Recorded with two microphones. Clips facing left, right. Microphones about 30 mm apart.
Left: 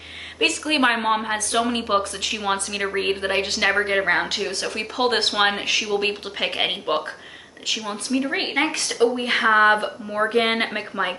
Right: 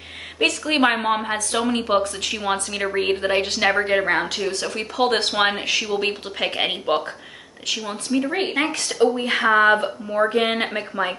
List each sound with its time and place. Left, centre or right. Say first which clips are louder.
0.4 s a woman's voice: right 1 dB; centre
8.3 s speech: right 1 dB; centre
8.5 s a woman's voice: left 1 dB; centre